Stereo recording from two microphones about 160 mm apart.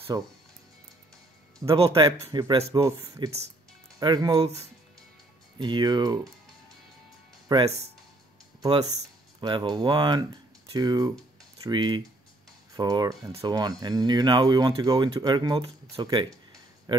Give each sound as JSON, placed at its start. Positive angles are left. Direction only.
{"t": 0.1, "sound": "speech", "side_deg": -25}
{"t": 1.6, "sound": "speech", "side_deg": -25}
{"t": 5.6, "sound": "speech", "side_deg": -30}
{"t": 7.5, "sound": "speech", "side_deg": -25}
{"t": 9.4, "sound": "speech", "side_deg": -25}